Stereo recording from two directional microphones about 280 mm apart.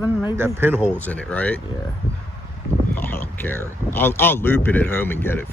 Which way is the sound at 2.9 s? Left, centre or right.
Centre.